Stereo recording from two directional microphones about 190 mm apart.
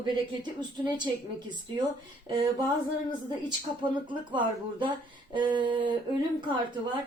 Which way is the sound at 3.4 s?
25° right (ahead or behind).